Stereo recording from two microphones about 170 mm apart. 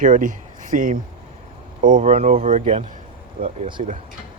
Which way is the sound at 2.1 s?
35° right (ahead or behind).